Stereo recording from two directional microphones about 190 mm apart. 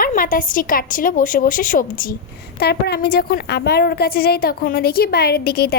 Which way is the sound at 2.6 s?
60° left (ahead or behind).